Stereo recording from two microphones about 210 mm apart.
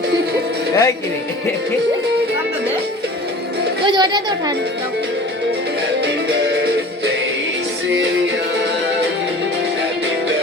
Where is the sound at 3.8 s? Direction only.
20° right (ahead or behind).